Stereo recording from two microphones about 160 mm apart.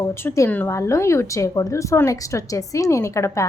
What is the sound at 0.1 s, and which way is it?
A woman's voice, 15° left (ahead or behind).